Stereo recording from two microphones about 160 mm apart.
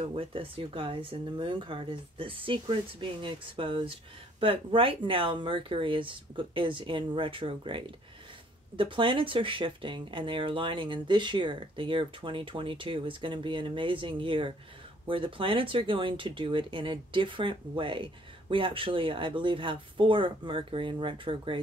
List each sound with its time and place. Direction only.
0.0 s speech: 35° right (ahead or behind)